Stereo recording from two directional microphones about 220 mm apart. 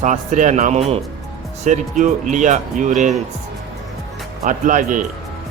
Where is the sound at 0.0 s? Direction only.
35° right (ahead or behind).